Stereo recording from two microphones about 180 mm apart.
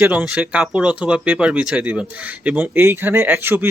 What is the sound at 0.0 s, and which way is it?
Speech, 5° right (ahead or behind).